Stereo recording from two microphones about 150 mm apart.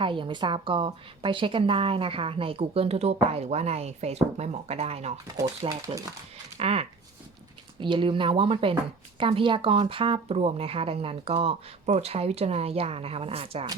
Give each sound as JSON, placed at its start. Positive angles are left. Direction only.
{"t": 0.0, "sound": "a woman's voice", "side_deg": -35}
{"t": 5.4, "sound": "speech", "side_deg": -20}
{"t": 6.6, "sound": "a woman's voice", "side_deg": -40}